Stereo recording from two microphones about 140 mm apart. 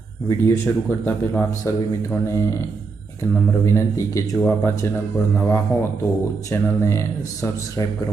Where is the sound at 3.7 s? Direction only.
20° left (ahead or behind).